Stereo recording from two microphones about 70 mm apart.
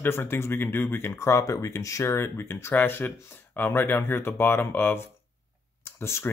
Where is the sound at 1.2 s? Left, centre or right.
Left.